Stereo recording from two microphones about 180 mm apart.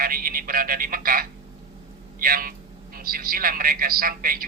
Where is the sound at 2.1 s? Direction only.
50° right (ahead or behind).